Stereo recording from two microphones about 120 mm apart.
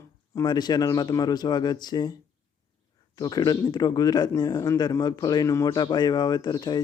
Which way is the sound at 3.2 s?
35° left (ahead or behind).